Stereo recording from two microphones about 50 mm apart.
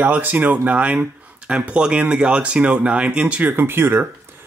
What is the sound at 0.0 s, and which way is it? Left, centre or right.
Speech, right.